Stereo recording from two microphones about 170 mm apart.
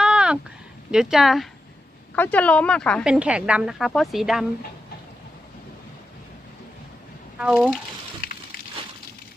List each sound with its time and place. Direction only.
0.0 s a sound: 5° right (ahead or behind)
0.9 s a woman's voice: 5° right (ahead or behind)
2.1 s speech: 10° left (ahead or behind)
3.0 s a woman's voice: 5° right (ahead or behind)
7.3 s a woman's voice: 5° right (ahead or behind)
8.2 s a sound: 60° left (ahead or behind)